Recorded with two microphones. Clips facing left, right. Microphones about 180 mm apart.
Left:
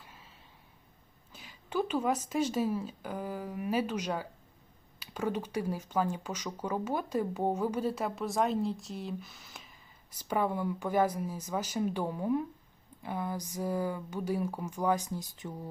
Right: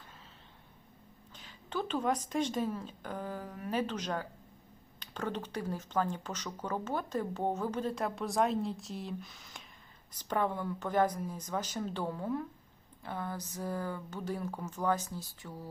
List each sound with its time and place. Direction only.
1.3 s speech: 10° left (ahead or behind)